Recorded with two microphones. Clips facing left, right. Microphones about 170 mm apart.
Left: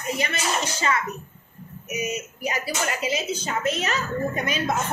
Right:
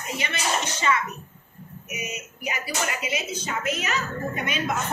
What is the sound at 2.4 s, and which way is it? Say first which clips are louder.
Speech: left 1 dB; 35° left (ahead or behind).